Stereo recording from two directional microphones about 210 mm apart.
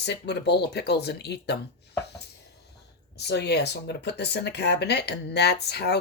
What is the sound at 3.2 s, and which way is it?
Speech, 50° left (ahead or behind).